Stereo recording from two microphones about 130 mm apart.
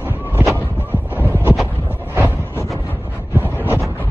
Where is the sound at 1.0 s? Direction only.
15° right (ahead or behind).